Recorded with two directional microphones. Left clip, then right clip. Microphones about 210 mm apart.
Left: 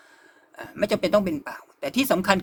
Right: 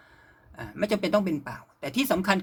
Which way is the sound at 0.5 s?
25° left (ahead or behind).